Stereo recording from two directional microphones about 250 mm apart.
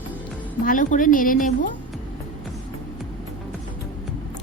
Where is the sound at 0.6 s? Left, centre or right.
Left.